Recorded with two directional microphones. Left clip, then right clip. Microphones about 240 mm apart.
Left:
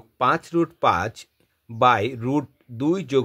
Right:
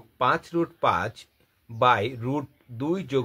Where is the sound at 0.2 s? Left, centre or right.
Left.